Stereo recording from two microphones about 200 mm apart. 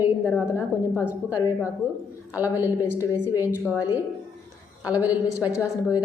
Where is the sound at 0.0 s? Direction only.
10° right (ahead or behind).